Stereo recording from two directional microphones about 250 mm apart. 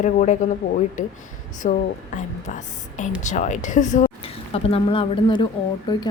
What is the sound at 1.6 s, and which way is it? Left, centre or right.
Speech, left.